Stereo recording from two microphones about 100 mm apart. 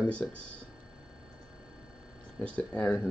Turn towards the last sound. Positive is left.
turn(degrees=20)  # may be behind; listen again after turning